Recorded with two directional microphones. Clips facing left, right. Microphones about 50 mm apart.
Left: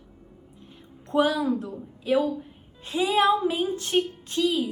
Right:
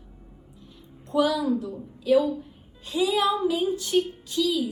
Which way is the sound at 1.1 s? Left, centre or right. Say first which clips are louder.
Even; left.